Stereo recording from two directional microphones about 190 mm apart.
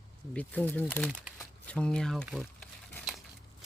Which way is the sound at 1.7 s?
5° left (ahead or behind).